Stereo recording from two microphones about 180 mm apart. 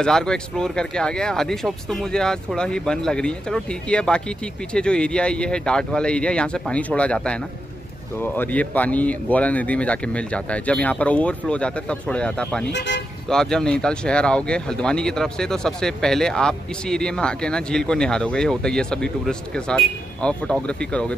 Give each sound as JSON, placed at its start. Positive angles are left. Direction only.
{"t": 0.0, "sound": "speech", "side_deg": 5}
{"t": 12.7, "sound": "speech", "side_deg": 80}
{"t": 13.3, "sound": "speech", "side_deg": 5}